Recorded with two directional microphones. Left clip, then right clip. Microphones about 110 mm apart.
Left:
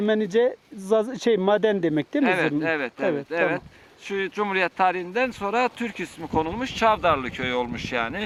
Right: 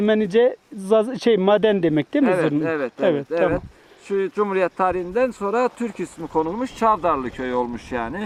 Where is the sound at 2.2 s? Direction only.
45° left (ahead or behind).